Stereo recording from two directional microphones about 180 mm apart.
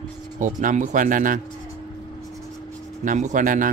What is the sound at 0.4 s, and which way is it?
A man's voice, 45° right (ahead or behind).